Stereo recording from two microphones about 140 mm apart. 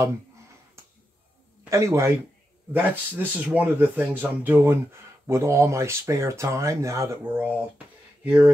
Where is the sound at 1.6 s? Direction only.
20° right (ahead or behind).